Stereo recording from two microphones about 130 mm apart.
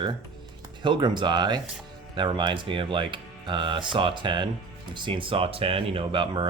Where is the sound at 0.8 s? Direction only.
35° right (ahead or behind).